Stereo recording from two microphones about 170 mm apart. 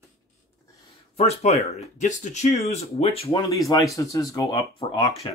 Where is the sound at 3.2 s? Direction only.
20° left (ahead or behind).